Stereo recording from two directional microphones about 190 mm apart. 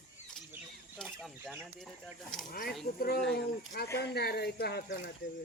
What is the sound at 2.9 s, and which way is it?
Speech, 55° left (ahead or behind).